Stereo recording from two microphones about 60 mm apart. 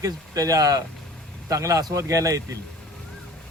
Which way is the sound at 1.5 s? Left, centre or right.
Right.